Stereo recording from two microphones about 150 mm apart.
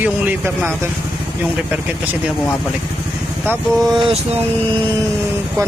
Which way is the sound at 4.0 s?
35° right (ahead or behind).